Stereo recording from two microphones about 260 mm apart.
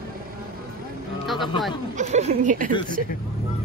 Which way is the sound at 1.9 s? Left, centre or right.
Right.